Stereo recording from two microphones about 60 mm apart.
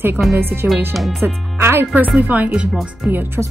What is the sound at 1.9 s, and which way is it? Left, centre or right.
Speech, right.